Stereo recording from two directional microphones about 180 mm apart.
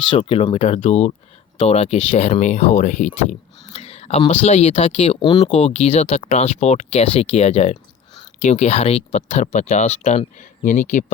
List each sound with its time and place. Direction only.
0.1 s speech: 30° left (ahead or behind)
3.8 s whispering: 35° left (ahead or behind)
4.4 s speech: 35° left (ahead or behind)